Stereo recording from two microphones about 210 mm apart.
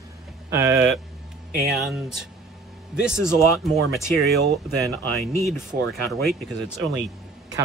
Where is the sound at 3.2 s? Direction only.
15° left (ahead or behind).